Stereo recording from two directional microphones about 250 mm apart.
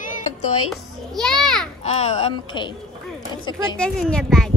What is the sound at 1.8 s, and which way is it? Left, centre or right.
A woman's voice, left.